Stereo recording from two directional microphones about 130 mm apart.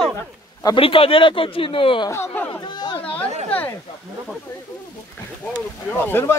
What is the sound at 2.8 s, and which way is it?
Chatter, 35° left (ahead or behind).